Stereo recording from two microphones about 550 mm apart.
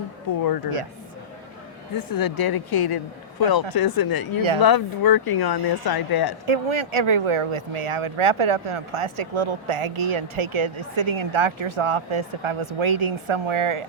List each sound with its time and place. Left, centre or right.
0.3 s speech: left
2.0 s speech: left
6.4 s speech: right